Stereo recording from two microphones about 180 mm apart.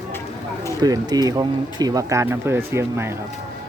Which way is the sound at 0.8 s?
20° right (ahead or behind).